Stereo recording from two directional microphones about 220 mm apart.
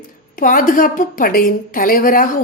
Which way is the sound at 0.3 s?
40° left (ahead or behind).